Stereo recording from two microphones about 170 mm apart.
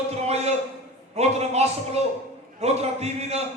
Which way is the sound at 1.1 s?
40° right (ahead or behind).